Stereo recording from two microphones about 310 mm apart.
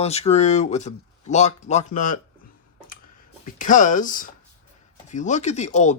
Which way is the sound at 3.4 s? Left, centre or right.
Left.